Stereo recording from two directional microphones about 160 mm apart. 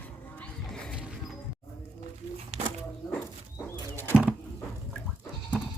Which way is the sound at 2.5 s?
40° right (ahead or behind).